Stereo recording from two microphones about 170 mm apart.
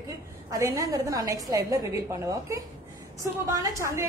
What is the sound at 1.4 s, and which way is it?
A woman's voice, 20° right (ahead or behind).